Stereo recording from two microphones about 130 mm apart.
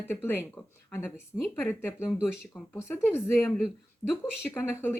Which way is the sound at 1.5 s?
20° left (ahead or behind).